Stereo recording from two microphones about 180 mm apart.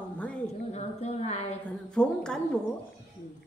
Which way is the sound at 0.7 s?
40° left (ahead or behind).